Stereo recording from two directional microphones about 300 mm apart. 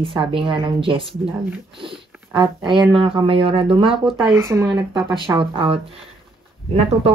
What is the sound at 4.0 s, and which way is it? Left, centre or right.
Speech, centre.